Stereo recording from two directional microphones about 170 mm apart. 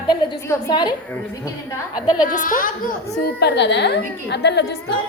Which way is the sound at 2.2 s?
50° left (ahead or behind).